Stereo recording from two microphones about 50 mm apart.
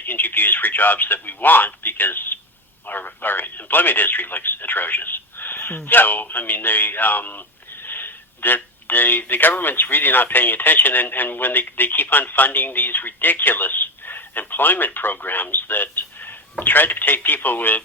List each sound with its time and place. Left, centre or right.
0.0 s speech: left